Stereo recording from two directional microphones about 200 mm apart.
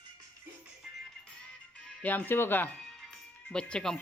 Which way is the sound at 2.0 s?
10° left (ahead or behind).